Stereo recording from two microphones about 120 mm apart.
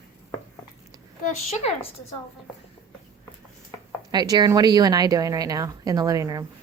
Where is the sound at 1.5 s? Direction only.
60° left (ahead or behind).